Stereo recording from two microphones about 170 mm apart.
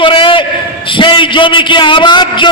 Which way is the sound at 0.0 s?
30° left (ahead or behind).